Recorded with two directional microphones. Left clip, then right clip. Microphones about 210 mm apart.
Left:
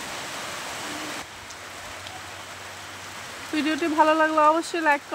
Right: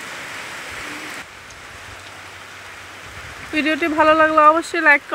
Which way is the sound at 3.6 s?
5° right (ahead or behind).